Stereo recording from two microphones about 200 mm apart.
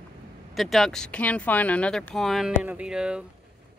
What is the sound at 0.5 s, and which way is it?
Speech, centre (ahead or behind).